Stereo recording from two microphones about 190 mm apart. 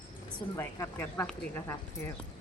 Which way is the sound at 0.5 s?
15° left (ahead or behind).